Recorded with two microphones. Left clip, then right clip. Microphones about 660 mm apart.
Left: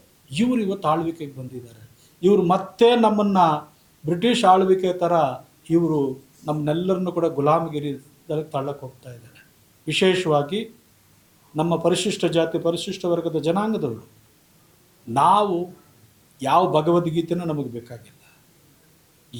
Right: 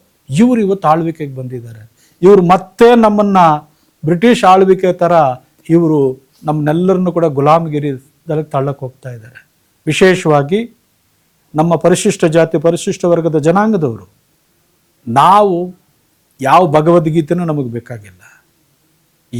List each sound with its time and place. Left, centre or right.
0.3 s speech: right
2.7 s speech: right
9.8 s speech: right
15.1 s speech: right